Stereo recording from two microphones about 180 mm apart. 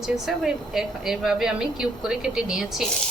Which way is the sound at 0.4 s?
5° right (ahead or behind).